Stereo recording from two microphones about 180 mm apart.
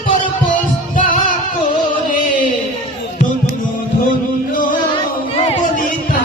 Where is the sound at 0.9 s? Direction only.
45° left (ahead or behind).